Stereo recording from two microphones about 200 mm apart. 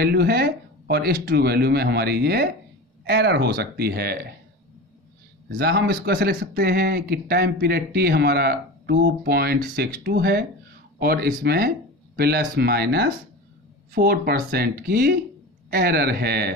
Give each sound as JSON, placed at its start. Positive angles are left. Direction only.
{"t": 0.0, "sound": "speech", "side_deg": -55}
{"t": 5.6, "sound": "speech", "side_deg": -55}